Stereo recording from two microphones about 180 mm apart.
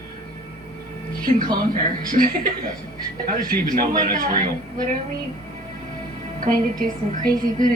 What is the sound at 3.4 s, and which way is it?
A man's voice, 50° right (ahead or behind).